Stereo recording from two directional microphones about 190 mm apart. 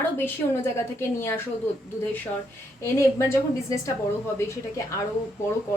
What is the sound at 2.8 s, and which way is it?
Speech, 15° left (ahead or behind).